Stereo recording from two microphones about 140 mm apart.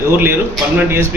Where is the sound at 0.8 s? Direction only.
15° right (ahead or behind).